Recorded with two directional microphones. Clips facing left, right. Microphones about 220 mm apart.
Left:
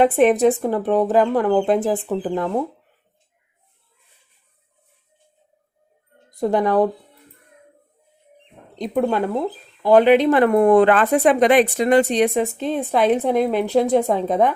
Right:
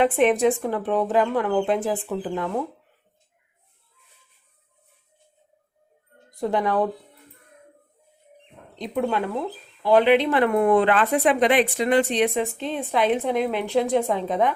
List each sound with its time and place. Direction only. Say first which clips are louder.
0.0 s speech: left 4 dB; 40° left (ahead or behind)
6.4 s speech: left 5 dB; 40° left (ahead or behind)
8.8 s speech: left 4 dB; 40° left (ahead or behind)